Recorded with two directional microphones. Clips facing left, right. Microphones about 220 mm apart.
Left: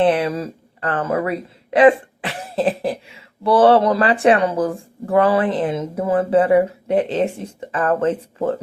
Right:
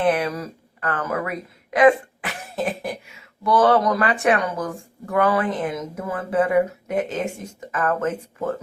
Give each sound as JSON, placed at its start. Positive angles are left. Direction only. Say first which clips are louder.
{"t": 0.0, "sound": "speech", "louder": "left 4 dB", "side_deg": 30}